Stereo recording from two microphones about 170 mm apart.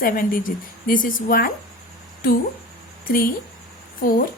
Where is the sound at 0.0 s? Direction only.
55° left (ahead or behind).